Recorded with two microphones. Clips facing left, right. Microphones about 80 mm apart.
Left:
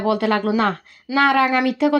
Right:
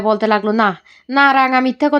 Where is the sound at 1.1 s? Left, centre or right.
Right.